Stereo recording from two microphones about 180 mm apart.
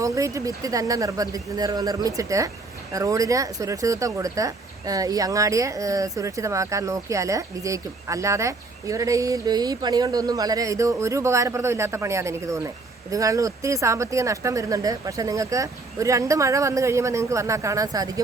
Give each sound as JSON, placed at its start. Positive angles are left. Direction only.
{"t": 0.0, "sound": "speech", "side_deg": -15}